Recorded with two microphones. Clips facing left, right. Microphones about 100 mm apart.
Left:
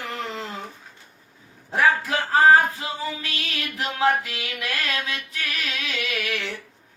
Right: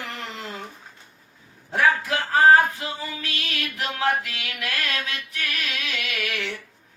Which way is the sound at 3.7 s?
30° left (ahead or behind).